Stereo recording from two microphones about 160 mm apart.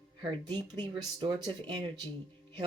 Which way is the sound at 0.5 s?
30° right (ahead or behind).